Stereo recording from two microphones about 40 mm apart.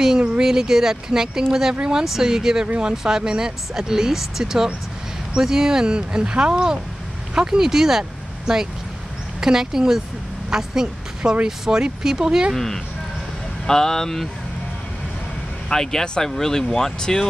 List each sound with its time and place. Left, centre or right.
0.4 s a woman's voice: centre
12.5 s speech: centre
15.7 s speech: centre